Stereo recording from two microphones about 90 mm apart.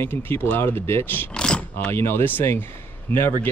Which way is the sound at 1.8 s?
25° left (ahead or behind).